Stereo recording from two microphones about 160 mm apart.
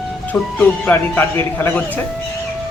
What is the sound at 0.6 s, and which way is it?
Speech, 15° left (ahead or behind).